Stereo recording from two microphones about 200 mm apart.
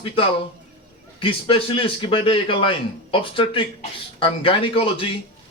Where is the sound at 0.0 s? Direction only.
25° left (ahead or behind).